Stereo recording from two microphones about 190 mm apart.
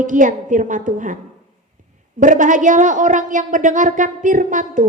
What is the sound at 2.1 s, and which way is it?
A woman's voice, 45° right (ahead or behind).